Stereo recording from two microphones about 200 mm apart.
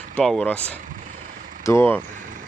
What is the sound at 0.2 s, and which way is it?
Speech, 5° left (ahead or behind).